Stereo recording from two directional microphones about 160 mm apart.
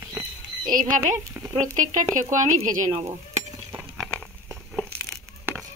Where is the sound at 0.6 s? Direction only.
60° right (ahead or behind).